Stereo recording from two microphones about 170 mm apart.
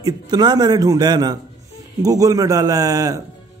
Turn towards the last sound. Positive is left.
turn(degrees=-20)  # may be behind; listen again after turning